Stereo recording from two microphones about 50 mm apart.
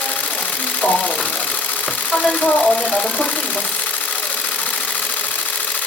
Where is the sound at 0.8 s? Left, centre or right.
Left.